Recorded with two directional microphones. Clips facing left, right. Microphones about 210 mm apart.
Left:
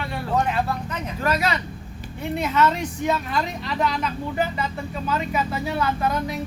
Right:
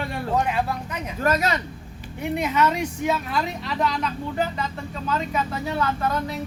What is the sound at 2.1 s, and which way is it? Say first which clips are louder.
Speech: even; 15° right (ahead or behind).